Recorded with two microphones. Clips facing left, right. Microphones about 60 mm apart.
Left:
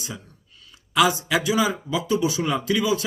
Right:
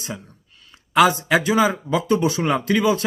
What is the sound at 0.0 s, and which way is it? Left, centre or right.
A man's voice, right.